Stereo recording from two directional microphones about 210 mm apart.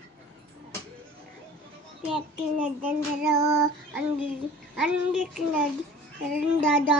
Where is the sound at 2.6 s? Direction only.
5° right (ahead or behind).